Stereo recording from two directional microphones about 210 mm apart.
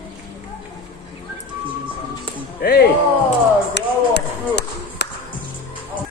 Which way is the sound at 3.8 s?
55° left (ahead or behind).